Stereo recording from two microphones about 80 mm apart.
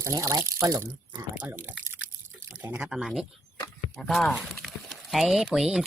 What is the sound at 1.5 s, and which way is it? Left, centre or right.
Speech, right.